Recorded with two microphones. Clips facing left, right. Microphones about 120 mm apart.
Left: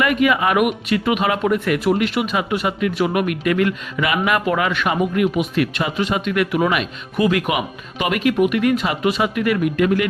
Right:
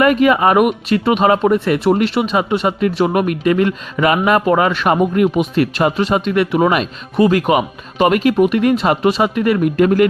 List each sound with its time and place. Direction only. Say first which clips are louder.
0.0 s speech: right 5 dB; 40° right (ahead or behind)